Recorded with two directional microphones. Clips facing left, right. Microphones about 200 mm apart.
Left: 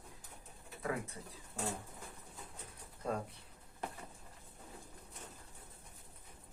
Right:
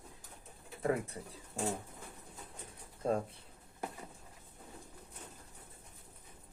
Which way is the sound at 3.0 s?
30° right (ahead or behind).